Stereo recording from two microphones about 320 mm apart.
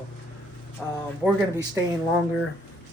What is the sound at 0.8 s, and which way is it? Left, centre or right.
Speech, centre.